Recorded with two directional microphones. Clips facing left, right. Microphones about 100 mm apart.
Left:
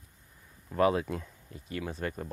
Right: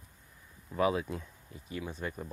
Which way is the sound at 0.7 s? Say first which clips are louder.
Left 3 dB; 55° left (ahead or behind).